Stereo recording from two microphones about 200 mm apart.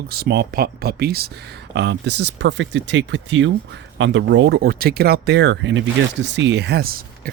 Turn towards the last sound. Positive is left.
turn(degrees=-50)  # may be behind; listen again after turning